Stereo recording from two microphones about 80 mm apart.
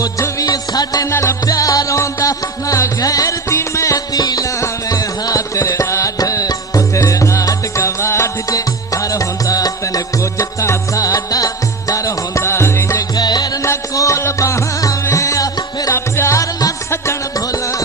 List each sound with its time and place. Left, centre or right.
0.0 s music: left
1.2 s music: left
5.5 s music: left
8.5 s music: left
13.1 s music: left
13.7 s music: left